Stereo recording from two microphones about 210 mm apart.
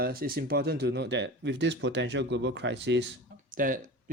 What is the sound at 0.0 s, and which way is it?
Speech, 45° right (ahead or behind).